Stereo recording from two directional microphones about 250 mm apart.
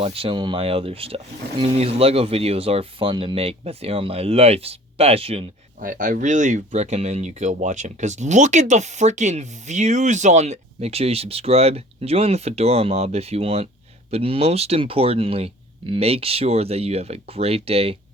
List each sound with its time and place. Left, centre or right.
0.0 s speech: right